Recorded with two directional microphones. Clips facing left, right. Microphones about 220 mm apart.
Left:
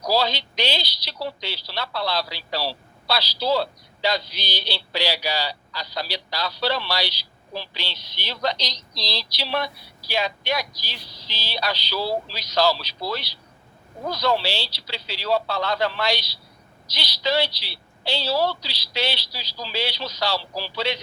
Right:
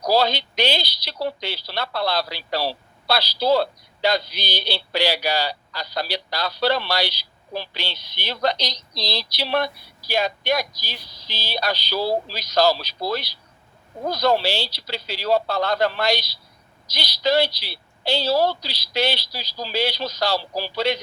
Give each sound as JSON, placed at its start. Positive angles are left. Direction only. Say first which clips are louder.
{"t": 0.0, "sound": "a woman's voice", "louder": "right 3 dB", "side_deg": -50}